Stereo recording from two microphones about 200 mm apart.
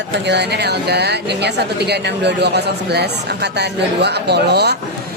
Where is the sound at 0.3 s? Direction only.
55° right (ahead or behind).